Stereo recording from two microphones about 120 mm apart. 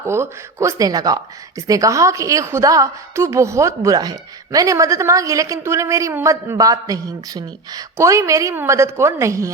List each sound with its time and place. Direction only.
0.0 s speech: 20° right (ahead or behind)